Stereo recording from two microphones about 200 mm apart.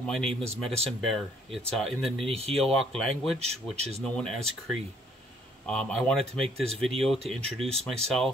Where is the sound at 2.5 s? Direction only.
Centre (ahead or behind).